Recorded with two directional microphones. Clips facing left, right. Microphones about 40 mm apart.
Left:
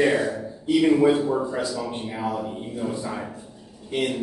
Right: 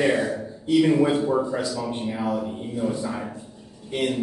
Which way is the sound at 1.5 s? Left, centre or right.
Centre.